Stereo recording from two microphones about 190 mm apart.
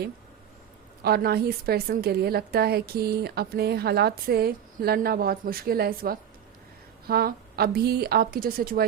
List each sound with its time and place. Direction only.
1.0 s a woman's voice: 55° right (ahead or behind)